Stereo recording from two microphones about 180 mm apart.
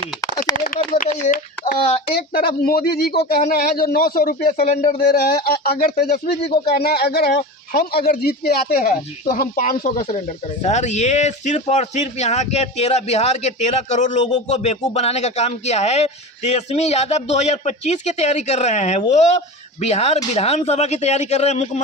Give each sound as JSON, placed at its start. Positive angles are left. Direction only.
{"t": 1.2, "sound": "a sound", "side_deg": 50}
{"t": 2.1, "sound": "speech", "side_deg": 60}
{"t": 4.6, "sound": "speech", "side_deg": 40}
{"t": 5.5, "sound": "speech", "side_deg": 55}